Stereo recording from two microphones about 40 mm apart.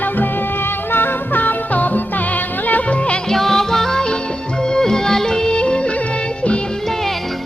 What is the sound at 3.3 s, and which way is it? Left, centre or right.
Music, centre.